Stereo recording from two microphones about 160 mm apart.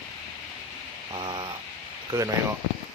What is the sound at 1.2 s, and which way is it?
Speech, 30° right (ahead or behind).